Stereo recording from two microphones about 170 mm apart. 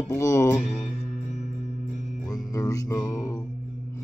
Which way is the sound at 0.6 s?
45° left (ahead or behind).